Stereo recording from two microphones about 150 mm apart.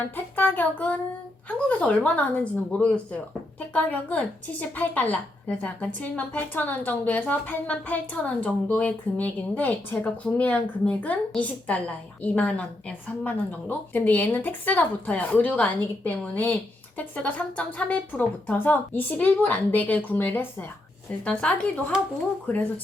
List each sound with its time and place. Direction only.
0.0 s a woman's voice: 10° left (ahead or behind)